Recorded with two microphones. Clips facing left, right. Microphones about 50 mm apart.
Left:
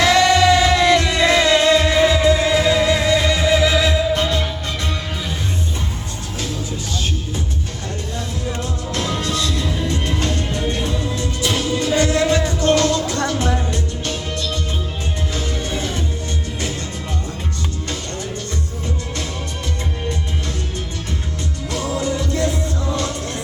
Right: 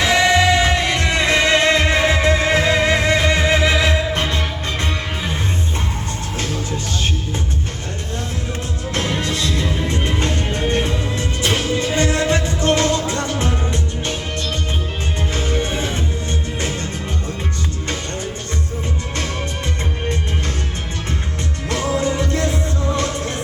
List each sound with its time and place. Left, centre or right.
0.0 s music: right
8.9 s music: right
15.3 s music: right
21.7 s music: right